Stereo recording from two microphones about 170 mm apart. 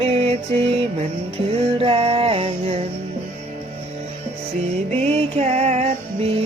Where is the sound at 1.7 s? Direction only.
35° right (ahead or behind).